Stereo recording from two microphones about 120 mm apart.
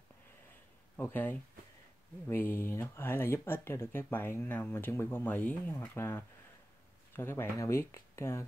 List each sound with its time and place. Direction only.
0.9 s speech: 15° left (ahead or behind)